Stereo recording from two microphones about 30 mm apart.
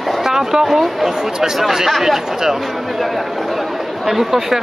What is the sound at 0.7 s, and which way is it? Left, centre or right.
Speech, centre.